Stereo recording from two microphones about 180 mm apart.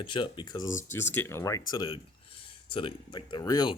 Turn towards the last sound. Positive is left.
turn(degrees=20)  # may be behind; listen again after turning